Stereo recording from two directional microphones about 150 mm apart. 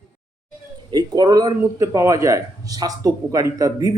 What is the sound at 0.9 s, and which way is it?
Speech, 25° right (ahead or behind).